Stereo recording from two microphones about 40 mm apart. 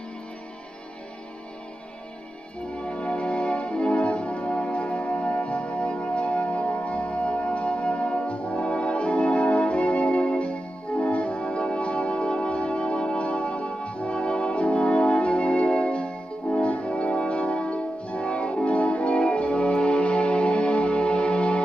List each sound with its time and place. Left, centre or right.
2.7 s music: left